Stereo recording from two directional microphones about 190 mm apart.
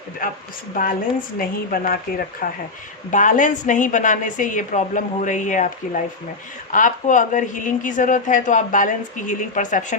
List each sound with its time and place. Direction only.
0.2 s a woman's voice: 50° left (ahead or behind)
1.4 s a woman's voice: 50° left (ahead or behind)